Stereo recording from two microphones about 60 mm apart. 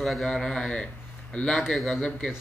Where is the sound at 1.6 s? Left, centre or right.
Centre.